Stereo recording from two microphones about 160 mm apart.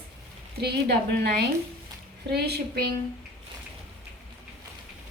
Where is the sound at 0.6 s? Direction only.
90° right.